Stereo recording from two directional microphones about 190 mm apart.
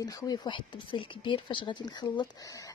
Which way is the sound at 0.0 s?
20° left (ahead or behind).